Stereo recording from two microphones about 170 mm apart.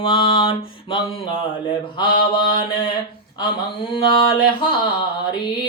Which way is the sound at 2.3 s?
30° left (ahead or behind).